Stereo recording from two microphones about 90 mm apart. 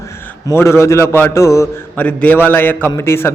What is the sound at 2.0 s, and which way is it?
A man's voice, 20° left (ahead or behind).